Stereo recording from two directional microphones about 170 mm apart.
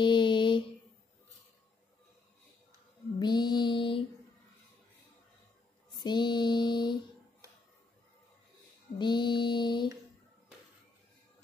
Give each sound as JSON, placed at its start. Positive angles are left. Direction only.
{"t": 0.0, "sound": "mantra", "side_deg": 30}
{"t": 3.2, "sound": "mantra", "side_deg": 25}
{"t": 5.9, "sound": "mantra", "side_deg": 25}
{"t": 8.9, "sound": "mantra", "side_deg": 25}